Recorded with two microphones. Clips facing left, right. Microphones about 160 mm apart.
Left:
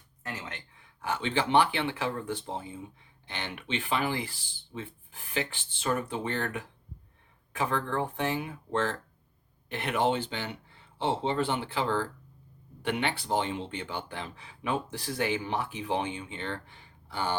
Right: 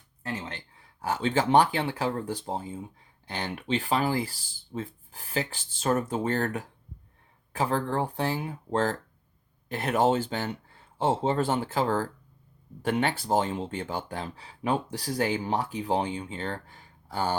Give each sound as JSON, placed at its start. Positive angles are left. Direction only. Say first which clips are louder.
{"t": 0.2, "sound": "speech", "louder": "right 4 dB", "side_deg": -30}